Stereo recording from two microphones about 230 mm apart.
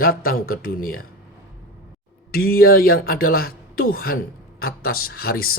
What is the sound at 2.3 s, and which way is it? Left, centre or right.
Speech, left.